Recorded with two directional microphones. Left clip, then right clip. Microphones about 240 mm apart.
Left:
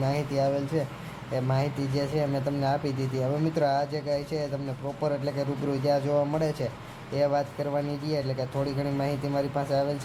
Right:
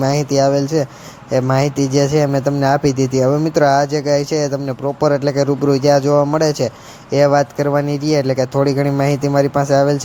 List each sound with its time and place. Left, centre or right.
0.0 s speech: right